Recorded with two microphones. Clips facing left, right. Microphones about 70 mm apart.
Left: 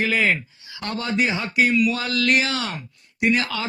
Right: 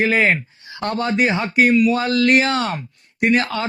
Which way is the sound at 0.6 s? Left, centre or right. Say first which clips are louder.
Right 7 dB; right.